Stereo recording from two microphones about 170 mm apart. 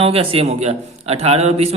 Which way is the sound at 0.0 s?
35° right (ahead or behind).